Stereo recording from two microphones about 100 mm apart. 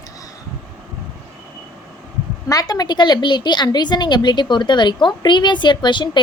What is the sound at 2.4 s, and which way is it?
A woman's voice, 40° left (ahead or behind).